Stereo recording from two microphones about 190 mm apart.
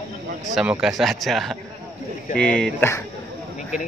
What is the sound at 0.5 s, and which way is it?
Speech, 5° right (ahead or behind).